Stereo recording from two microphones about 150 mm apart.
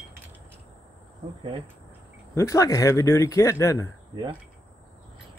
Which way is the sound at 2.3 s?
20° left (ahead or behind).